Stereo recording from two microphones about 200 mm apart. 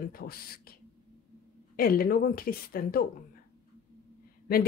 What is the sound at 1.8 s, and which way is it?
Speech, 45° left (ahead or behind).